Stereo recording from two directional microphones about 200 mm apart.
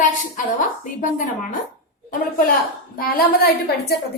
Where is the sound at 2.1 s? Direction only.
45° left (ahead or behind).